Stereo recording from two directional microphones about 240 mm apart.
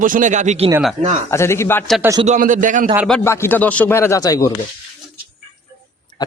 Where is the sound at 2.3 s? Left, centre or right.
Right.